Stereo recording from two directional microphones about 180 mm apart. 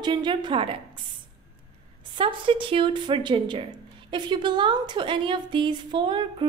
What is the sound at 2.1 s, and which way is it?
A woman's voice, 30° right (ahead or behind).